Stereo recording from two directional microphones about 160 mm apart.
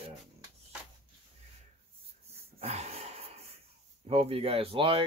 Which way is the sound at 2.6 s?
40° right (ahead or behind).